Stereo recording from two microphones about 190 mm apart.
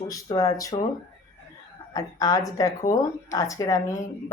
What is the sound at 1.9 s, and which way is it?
Speech, 20° left (ahead or behind).